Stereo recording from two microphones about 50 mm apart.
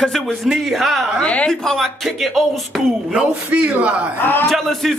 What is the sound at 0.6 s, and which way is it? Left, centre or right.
Speech, centre.